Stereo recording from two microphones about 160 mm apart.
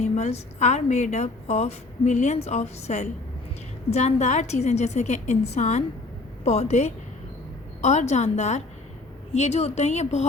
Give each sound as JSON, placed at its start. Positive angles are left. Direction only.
{"t": 0.0, "sound": "a woman's voice", "side_deg": 45}